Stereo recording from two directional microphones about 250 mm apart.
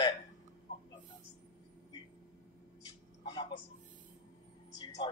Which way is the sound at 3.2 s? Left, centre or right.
Centre.